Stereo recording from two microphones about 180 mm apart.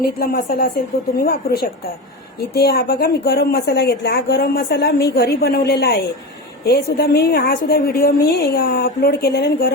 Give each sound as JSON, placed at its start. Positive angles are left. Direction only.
{"t": 0.0, "sound": "a woman's voice", "side_deg": 60}